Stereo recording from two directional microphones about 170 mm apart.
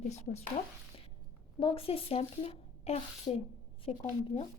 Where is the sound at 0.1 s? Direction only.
40° left (ahead or behind).